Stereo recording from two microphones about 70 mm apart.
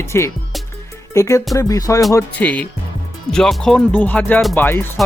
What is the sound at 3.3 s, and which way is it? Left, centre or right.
Speech, centre.